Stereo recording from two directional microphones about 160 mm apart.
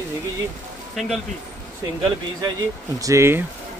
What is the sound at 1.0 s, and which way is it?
Speech, centre (ahead or behind).